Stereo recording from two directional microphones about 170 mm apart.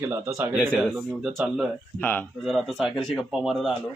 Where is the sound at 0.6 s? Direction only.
5° left (ahead or behind).